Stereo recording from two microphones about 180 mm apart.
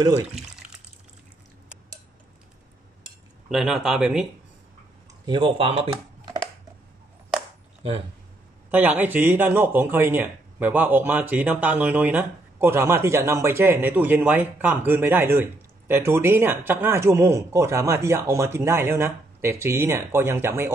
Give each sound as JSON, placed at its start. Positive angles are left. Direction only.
{"t": 3.4, "sound": "speech", "side_deg": 0}
{"t": 5.2, "sound": "speech", "side_deg": -25}
{"t": 8.6, "sound": "speech", "side_deg": -10}